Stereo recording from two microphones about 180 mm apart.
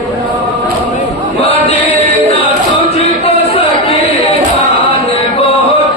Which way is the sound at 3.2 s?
35° left (ahead or behind).